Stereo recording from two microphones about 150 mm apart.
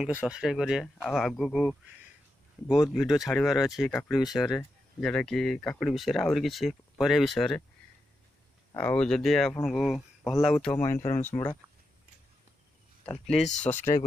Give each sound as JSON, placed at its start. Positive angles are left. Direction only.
{"t": 0.0, "sound": "speech", "side_deg": -5}
{"t": 2.7, "sound": "speech", "side_deg": -5}
{"t": 8.7, "sound": "speech", "side_deg": 10}
{"t": 10.7, "sound": "speech", "side_deg": 20}
{"t": 13.6, "sound": "speech", "side_deg": 50}